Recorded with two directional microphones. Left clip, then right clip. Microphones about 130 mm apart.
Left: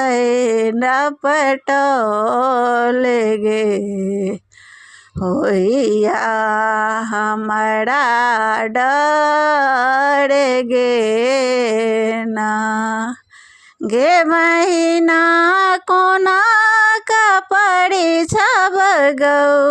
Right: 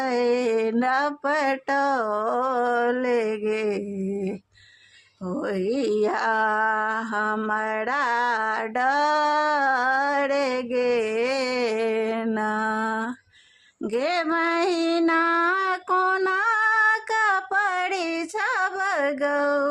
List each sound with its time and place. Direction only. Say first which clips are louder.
0.0 s a sound: left 8 dB; 35° left (ahead or behind)
5.3 s speech: left 11 dB; 50° left (ahead or behind)
13.9 s female singing: left 12 dB; 45° left (ahead or behind)